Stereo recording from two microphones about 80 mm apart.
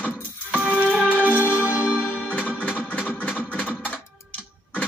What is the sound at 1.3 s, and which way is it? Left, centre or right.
Music, left.